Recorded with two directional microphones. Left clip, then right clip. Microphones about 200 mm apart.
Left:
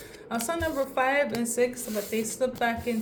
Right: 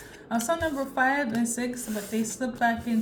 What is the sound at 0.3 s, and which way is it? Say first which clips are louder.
Speech: right 2 dB; 25° left (ahead or behind).